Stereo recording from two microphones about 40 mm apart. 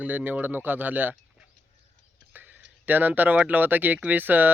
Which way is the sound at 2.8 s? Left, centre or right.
Right.